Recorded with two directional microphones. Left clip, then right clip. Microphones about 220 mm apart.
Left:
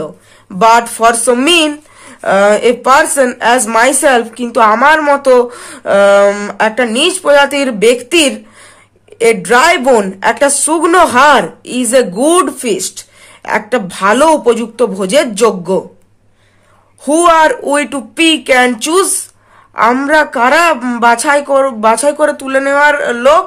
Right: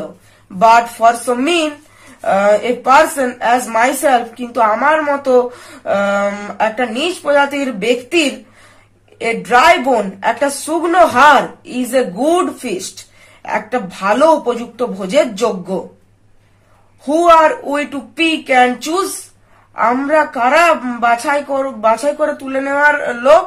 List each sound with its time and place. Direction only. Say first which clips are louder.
0.6 s speech: left 2 dB; 50° left (ahead or behind)
17.6 s speech: left 6 dB; 50° left (ahead or behind)